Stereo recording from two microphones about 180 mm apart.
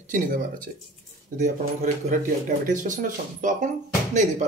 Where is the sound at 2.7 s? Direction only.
45° right (ahead or behind).